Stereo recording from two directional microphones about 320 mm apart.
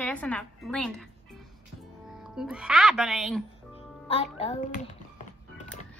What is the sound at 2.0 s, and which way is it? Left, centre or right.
Speech, centre.